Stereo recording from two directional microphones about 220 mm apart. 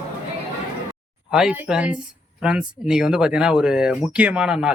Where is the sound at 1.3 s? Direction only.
5° right (ahead or behind).